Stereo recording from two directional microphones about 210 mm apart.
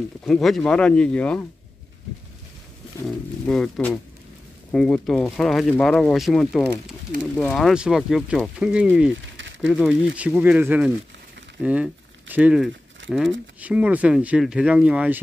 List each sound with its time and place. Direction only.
0.2 s speech: centre (ahead or behind)
3.4 s speech: 5° left (ahead or behind)